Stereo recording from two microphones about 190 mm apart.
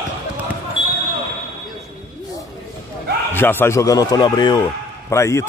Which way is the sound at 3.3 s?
10° left (ahead or behind).